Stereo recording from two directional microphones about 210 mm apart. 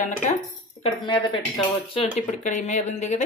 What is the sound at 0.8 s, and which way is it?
Speech, 25° left (ahead or behind).